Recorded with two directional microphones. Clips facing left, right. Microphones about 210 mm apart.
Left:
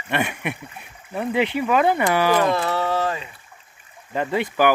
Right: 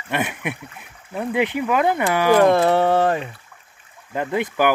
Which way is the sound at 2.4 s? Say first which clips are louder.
Right 6 dB; 55° right (ahead or behind).